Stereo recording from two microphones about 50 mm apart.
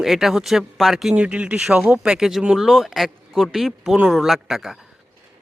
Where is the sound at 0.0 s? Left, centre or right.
Centre.